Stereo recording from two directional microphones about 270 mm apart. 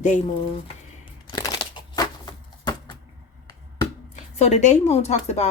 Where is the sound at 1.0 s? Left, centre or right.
Centre.